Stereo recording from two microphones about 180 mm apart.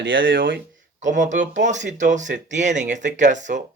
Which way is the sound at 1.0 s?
45° right (ahead or behind).